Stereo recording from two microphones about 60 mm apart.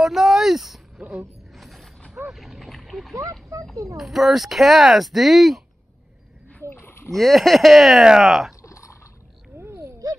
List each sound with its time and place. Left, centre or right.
0.0 s a sound: centre
1.5 s mechanisms: centre
2.2 s speech: centre
3.2 s speech: right
3.9 s speech: centre
6.7 s rowboat: left
7.1 s speech: centre
9.5 s a sound: right
10.0 s a sound: right